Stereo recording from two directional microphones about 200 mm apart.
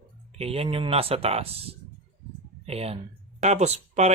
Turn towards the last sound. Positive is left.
turn(degrees=-35)  # may be behind; listen again after turning